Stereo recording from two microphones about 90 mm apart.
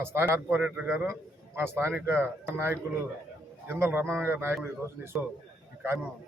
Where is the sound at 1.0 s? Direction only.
30° right (ahead or behind).